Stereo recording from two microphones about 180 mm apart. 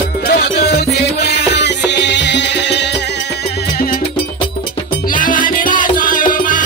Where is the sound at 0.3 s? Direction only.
65° left (ahead or behind).